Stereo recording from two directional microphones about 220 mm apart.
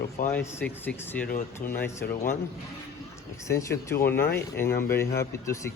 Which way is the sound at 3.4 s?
15° left (ahead or behind).